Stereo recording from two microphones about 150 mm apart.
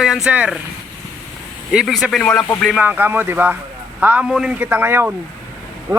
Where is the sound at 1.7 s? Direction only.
Centre (ahead or behind).